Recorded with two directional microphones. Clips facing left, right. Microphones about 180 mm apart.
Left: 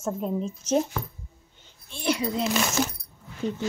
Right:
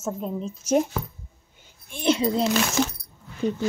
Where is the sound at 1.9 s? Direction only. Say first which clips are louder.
Right 4 dB; 20° right (ahead or behind).